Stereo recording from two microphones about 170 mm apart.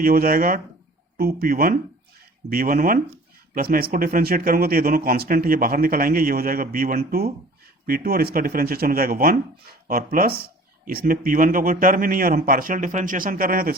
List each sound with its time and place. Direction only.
0.0 s speech: 60° right (ahead or behind)